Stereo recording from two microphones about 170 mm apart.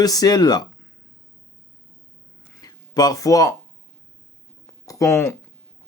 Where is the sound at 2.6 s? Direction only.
20° left (ahead or behind).